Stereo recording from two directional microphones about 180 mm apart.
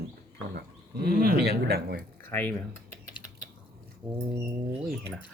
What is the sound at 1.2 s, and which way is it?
Speech, 60° right (ahead or behind).